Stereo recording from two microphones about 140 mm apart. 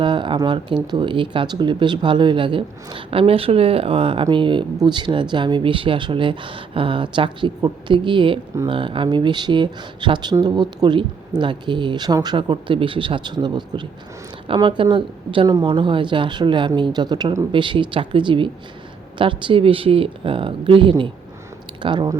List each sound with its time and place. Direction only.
0.0 s speech: 35° right (ahead or behind)